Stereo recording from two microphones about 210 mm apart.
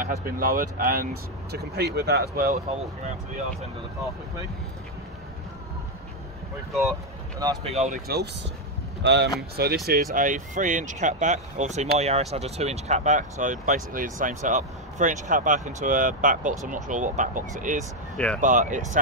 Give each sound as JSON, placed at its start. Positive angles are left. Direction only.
{"t": 0.0, "sound": "speech", "side_deg": -45}
{"t": 6.7, "sound": "speech", "side_deg": 0}
{"t": 7.6, "sound": "speech", "side_deg": -30}
{"t": 9.0, "sound": "speech", "side_deg": -55}
{"t": 10.1, "sound": "speech", "side_deg": -40}
{"t": 18.1, "sound": "speech", "side_deg": 5}
{"t": 18.4, "sound": "speech", "side_deg": -35}